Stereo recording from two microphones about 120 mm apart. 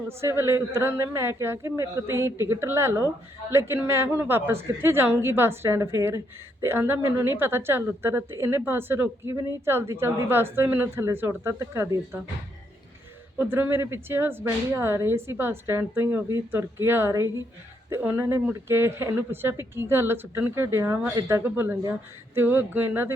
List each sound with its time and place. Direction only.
0.2 s a woman's voice: 25° right (ahead or behind)
13.4 s a woman's voice: 20° right (ahead or behind)